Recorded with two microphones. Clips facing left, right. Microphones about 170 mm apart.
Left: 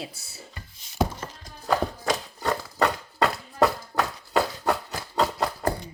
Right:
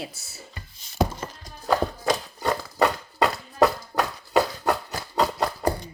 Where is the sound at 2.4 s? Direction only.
15° right (ahead or behind).